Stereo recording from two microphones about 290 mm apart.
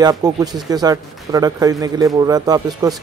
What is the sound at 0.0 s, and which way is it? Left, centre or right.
A man's voice, centre.